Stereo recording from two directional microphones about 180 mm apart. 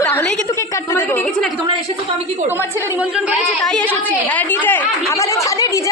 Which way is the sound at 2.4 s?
10° right (ahead or behind).